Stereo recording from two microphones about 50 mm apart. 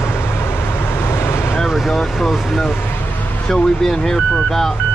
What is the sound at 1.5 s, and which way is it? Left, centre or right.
Vehicle, centre.